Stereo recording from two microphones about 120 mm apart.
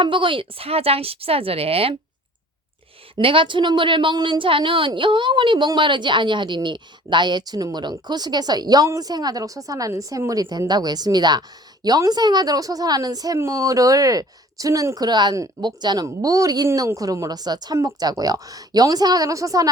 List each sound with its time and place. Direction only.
0.0 s speech: 45° right (ahead or behind)
3.2 s a woman's voice: 45° right (ahead or behind); by 19.7 s 30° right (ahead or behind)